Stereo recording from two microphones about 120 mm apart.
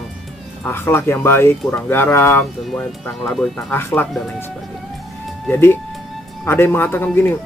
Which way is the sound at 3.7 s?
20° left (ahead or behind).